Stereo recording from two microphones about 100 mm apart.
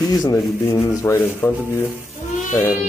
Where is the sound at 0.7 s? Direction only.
25° left (ahead or behind).